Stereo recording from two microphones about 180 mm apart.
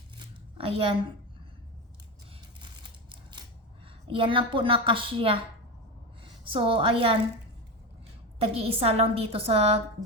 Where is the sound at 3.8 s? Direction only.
30° right (ahead or behind).